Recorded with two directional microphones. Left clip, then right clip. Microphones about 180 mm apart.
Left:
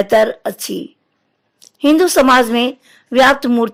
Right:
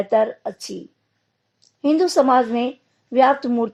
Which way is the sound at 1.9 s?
40° left (ahead or behind).